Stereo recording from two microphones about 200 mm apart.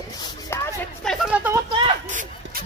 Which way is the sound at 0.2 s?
15° left (ahead or behind).